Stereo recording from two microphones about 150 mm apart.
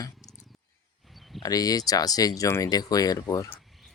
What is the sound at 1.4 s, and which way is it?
Speech, 25° left (ahead or behind).